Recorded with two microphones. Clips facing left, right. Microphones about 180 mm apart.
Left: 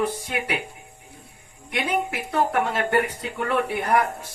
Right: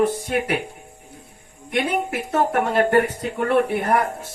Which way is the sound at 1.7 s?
45° right (ahead or behind).